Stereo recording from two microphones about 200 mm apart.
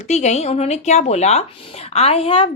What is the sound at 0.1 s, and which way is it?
A woman's voice, 35° left (ahead or behind).